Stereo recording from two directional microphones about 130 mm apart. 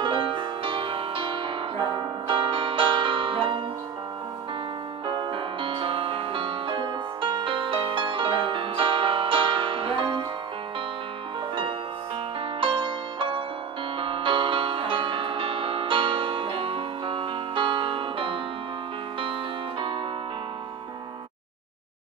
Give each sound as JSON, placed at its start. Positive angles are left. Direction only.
{"t": 0.0, "sound": "music", "side_deg": -40}
{"t": 5.0, "sound": "music", "side_deg": -35}
{"t": 12.5, "sound": "music", "side_deg": -40}